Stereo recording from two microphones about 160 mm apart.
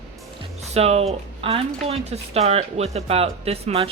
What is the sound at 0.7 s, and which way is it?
Speech, 40° right (ahead or behind).